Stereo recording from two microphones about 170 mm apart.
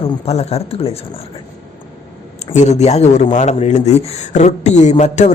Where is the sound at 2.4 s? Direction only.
45° left (ahead or behind).